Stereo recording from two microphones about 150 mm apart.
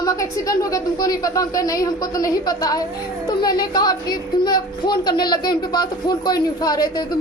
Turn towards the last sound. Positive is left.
turn(degrees=25)  # may be behind; listen again after turning